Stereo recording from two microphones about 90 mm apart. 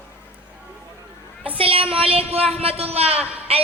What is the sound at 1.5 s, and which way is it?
A man's voice, 90° right.